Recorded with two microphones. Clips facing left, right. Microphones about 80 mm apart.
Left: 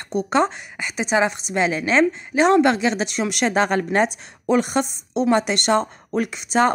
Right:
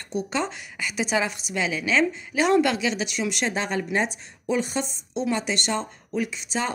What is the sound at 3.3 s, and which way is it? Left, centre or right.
Speech, left.